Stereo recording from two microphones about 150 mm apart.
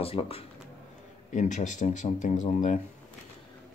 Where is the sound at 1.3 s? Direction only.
55° left (ahead or behind).